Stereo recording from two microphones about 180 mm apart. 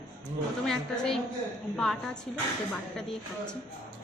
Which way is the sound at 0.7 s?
5° left (ahead or behind).